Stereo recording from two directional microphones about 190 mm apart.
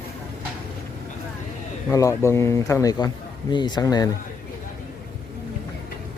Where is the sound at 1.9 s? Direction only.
15° left (ahead or behind).